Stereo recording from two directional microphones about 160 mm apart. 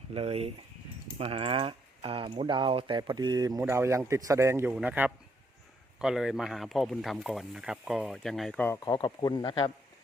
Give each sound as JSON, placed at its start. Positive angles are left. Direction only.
{"t": 0.1, "sound": "a man's voice", "side_deg": -35}
{"t": 8.8, "sound": "speech", "side_deg": 25}